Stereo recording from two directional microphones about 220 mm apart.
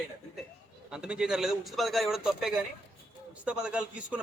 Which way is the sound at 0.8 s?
5° right (ahead or behind).